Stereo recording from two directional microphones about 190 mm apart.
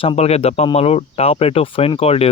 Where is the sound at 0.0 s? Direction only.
30° left (ahead or behind).